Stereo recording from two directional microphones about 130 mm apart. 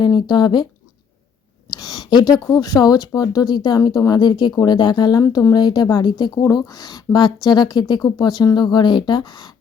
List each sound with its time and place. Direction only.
0.0 s speech: 35° left (ahead or behind)
1.7 s speech: 30° left (ahead or behind)